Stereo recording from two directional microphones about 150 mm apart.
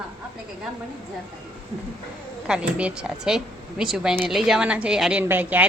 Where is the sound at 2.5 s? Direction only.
5° right (ahead or behind).